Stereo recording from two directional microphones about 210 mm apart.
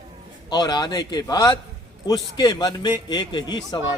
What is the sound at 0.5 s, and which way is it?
A man's voice, 20° left (ahead or behind).